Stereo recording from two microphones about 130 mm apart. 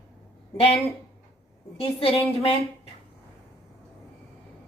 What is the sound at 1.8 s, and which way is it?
Speech, 45° left (ahead or behind).